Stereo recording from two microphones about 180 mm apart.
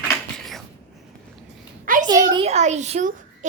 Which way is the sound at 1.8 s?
50° right (ahead or behind).